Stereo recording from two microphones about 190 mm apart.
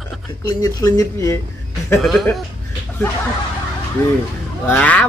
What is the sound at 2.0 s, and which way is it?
Speech, centre (ahead or behind).